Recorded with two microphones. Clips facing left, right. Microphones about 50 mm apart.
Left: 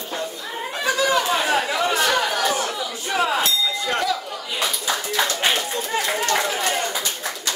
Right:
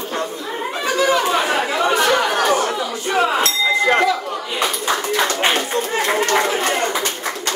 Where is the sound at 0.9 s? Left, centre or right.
Right.